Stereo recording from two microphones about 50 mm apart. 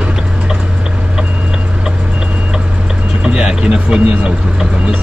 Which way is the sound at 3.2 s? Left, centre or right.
Centre.